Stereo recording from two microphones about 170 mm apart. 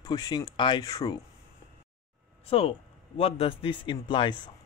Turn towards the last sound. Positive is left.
turn(degrees=25)  # may be behind; listen again after turning